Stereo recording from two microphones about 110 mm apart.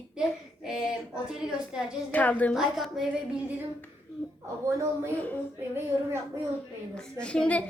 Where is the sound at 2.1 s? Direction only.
15° left (ahead or behind).